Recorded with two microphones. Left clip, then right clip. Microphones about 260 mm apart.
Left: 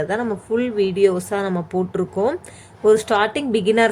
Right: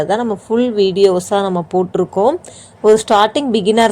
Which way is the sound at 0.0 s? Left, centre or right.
Centre.